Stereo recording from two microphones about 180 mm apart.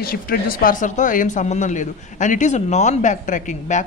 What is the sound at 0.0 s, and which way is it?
Speech, 55° left (ahead or behind).